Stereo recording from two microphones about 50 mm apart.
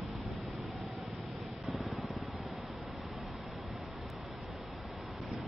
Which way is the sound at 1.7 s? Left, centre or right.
Centre.